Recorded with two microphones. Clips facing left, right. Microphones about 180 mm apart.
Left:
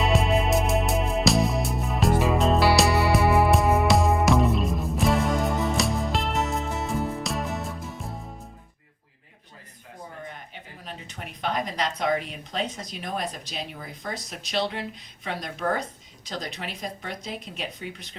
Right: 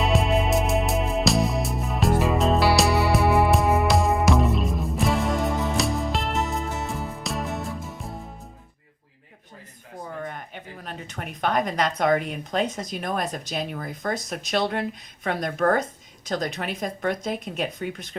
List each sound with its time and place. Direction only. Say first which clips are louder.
0.0 s music: right 1 dB; centre (ahead or behind)
10.2 s speech: right 5 dB; 55° right (ahead or behind)